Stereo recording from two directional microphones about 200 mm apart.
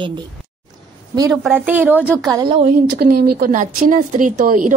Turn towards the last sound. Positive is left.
turn(degrees=-40)  # may be behind; listen again after turning